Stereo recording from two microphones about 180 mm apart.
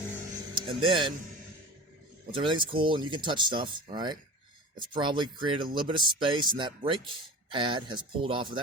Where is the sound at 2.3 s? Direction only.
25° right (ahead or behind).